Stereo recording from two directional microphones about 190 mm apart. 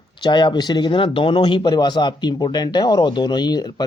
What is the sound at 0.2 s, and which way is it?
Speech, 25° left (ahead or behind).